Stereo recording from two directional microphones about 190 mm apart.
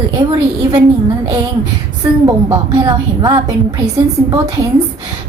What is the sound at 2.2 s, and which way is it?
A woman's voice, 20° right (ahead or behind).